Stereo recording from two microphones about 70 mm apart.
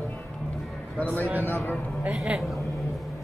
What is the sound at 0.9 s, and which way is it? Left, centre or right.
Speech, left.